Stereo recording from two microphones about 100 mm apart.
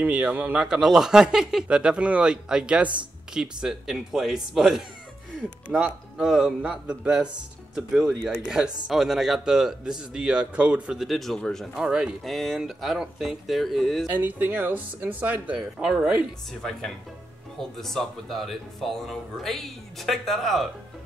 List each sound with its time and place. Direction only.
0.0 s speech: 15° right (ahead or behind)
11.1 s speech: centre (ahead or behind)
11.8 s speech: 10° right (ahead or behind)
14.1 s speech: 20° right (ahead or behind)
17.6 s speech: 5° left (ahead or behind)